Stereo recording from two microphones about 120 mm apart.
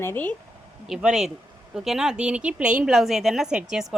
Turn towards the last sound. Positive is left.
turn(degrees=-5)  # may be behind; listen again after turning